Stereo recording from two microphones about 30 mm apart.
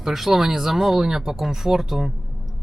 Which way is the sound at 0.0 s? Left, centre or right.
Centre.